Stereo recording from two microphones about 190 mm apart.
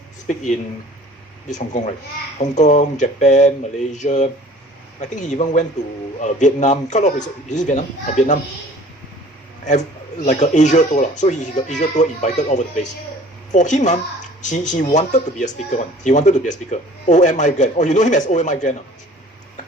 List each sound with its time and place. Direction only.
1.5 s speech: 40° left (ahead or behind)
10.2 s speech: 40° left (ahead or behind)